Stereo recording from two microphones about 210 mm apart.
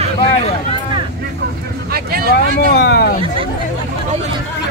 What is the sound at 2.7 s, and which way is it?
Speech, 50° left (ahead or behind).